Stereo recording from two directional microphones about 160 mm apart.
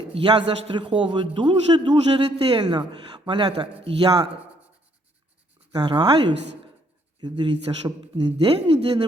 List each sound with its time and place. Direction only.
0.1 s a man's voice: 35° right (ahead or behind)
5.7 s speech: 25° right (ahead or behind)